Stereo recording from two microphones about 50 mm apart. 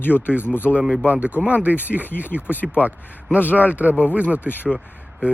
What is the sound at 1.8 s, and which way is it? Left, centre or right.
Speech, left.